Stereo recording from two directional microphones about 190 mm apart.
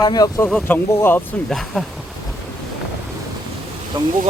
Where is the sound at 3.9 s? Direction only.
25° right (ahead or behind).